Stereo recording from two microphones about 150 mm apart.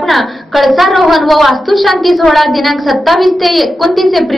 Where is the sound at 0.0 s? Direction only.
Centre (ahead or behind).